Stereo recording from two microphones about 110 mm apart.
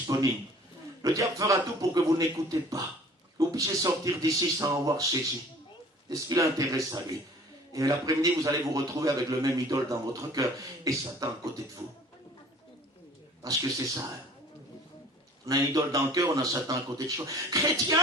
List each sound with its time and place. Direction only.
0.1 s a man's voice: 30° right (ahead or behind)
6.1 s a man's voice: 30° right (ahead or behind)
13.4 s a man's voice: 30° right (ahead or behind)
15.4 s a man's voice: 30° right (ahead or behind)